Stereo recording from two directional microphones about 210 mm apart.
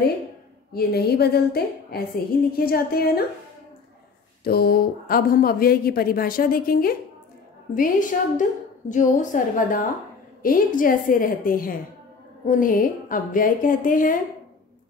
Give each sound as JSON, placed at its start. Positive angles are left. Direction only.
{"t": 0.7, "sound": "a woman's voice", "side_deg": 50}
{"t": 4.5, "sound": "a woman's voice", "side_deg": 45}